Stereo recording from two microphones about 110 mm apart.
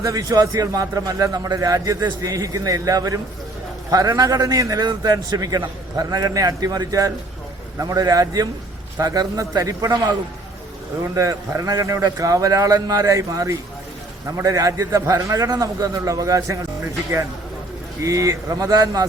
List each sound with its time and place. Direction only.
0.0 s a man's voice: 35° right (ahead or behind)
18.0 s a man's voice: 30° right (ahead or behind)